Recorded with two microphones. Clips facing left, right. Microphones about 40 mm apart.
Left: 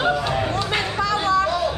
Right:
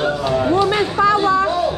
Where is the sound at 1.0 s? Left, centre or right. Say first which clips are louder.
Right 5 dB; right.